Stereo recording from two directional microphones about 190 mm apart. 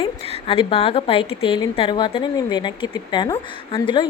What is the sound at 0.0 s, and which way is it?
A woman's voice, 25° left (ahead or behind).